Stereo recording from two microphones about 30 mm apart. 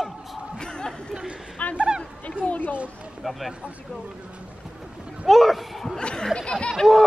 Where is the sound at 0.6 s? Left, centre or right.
Left.